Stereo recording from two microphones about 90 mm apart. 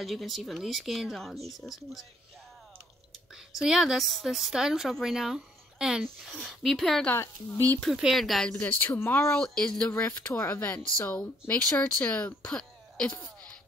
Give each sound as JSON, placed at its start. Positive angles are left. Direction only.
{"t": 0.0, "sound": "speech", "side_deg": 0}
{"t": 3.5, "sound": "speech", "side_deg": -5}
{"t": 8.5, "sound": "speech", "side_deg": 15}
{"t": 9.4, "sound": "speech", "side_deg": 10}